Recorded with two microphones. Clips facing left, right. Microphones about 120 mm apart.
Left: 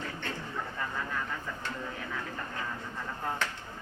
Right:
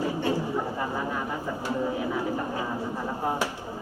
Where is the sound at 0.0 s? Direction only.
10° right (ahead or behind).